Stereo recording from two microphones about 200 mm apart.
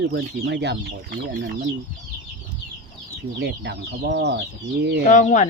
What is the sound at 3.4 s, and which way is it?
Speech, 55° right (ahead or behind).